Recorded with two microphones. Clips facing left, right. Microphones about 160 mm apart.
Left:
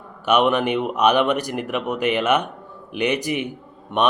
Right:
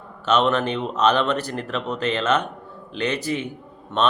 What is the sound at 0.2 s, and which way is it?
A man's voice, 15° left (ahead or behind).